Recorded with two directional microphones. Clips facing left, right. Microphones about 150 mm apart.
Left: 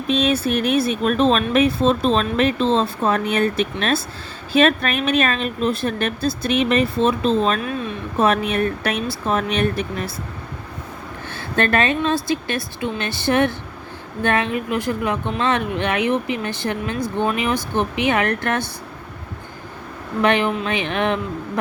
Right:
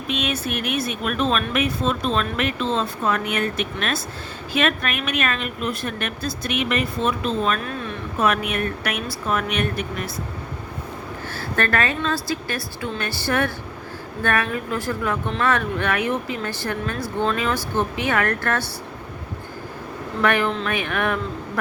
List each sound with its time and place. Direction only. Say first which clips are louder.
0.1 s speech: left 7 dB; 30° left (ahead or behind)
11.3 s speech: left 4 dB; 20° left (ahead or behind)
20.2 s speech: left 2 dB; 20° left (ahead or behind)